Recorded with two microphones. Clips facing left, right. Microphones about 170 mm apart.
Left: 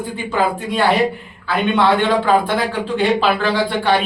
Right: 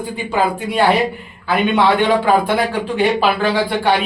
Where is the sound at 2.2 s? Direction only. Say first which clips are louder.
Right 1 dB; 10° right (ahead or behind).